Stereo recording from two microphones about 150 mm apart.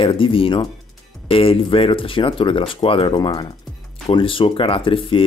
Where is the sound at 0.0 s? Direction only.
35° left (ahead or behind).